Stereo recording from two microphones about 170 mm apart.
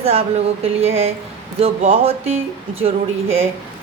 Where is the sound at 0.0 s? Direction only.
35° right (ahead or behind).